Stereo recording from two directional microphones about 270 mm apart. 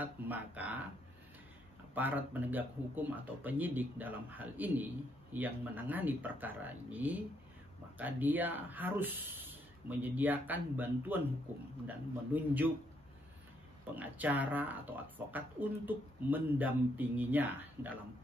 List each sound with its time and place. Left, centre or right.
0.0 s speech: centre
2.0 s speech: centre
12.4 s speech: centre
13.9 s speech: centre